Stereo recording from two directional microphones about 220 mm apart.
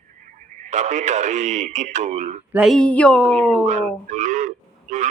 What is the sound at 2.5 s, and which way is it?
Speech, 5° right (ahead or behind).